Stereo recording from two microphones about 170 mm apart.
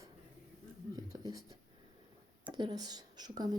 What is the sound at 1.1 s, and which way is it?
A woman's voice, 20° right (ahead or behind).